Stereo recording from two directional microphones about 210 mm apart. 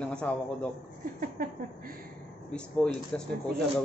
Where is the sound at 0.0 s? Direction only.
5° left (ahead or behind).